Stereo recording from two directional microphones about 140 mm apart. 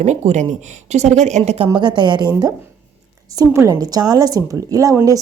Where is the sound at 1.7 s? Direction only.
30° right (ahead or behind).